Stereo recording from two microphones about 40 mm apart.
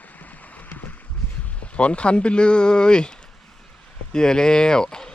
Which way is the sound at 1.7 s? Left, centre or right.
Left.